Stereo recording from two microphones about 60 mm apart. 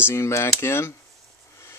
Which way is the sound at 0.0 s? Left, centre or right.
Left.